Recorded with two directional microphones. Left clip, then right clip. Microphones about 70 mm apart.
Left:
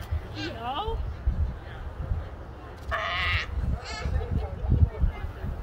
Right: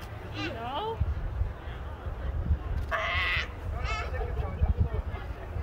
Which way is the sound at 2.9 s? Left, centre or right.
Centre.